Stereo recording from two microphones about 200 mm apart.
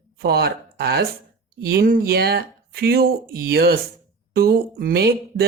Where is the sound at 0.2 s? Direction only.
50° right (ahead or behind).